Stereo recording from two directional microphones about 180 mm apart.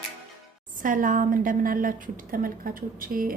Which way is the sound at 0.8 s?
45° right (ahead or behind).